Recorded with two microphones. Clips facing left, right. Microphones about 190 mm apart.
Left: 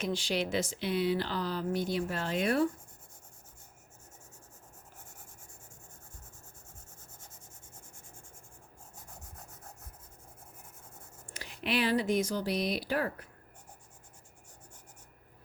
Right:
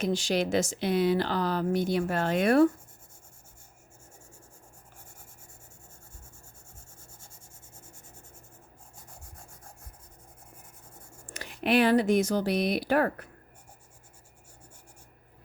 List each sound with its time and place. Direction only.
0.0 s speech: 45° right (ahead or behind)
1.1 s speech: 75° right (ahead or behind)
11.3 s speech: 55° right (ahead or behind)